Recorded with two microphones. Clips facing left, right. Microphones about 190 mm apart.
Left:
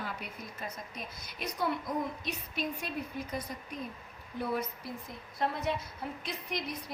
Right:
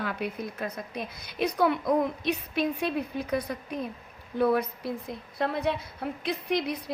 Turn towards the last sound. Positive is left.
turn(degrees=-65)  # may be behind; listen again after turning